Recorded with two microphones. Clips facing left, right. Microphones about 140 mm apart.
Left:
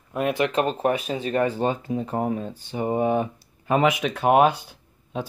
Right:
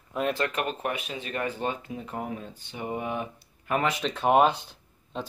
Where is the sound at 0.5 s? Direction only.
35° left (ahead or behind).